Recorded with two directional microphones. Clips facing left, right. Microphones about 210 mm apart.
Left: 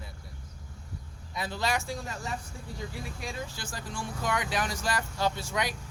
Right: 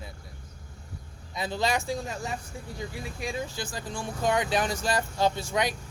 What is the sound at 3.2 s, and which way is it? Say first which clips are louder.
Speech: right 8 dB; 15° right (ahead or behind).